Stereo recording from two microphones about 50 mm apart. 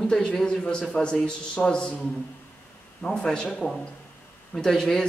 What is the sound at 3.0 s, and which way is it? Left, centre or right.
Speech, centre.